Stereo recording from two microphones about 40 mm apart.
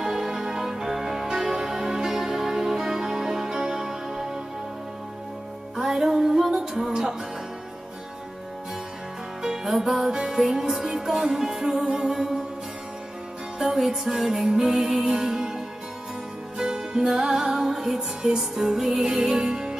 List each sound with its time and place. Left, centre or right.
0.0 s music: centre
5.8 s music: centre
9.4 s music: centre
13.6 s music: centre
14.3 s music: right
14.8 s music: centre